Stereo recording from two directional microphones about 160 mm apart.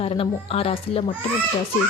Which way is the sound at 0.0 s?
40° left (ahead or behind).